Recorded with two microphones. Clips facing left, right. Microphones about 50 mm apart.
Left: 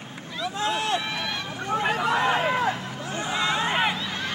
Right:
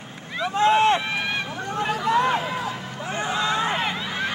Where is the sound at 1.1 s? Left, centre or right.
Right.